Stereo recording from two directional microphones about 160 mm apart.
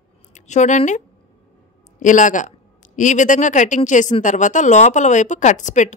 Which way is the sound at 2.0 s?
50° left (ahead or behind).